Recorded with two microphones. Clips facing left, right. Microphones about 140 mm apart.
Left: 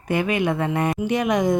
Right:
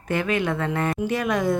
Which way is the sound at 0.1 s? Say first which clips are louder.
Left 2 dB; 15° left (ahead or behind).